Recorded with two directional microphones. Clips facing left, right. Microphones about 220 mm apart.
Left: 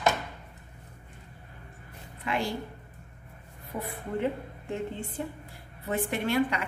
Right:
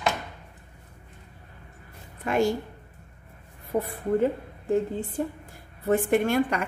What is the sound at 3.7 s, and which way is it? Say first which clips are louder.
A woman's voice: right 9 dB; 40° right (ahead or behind).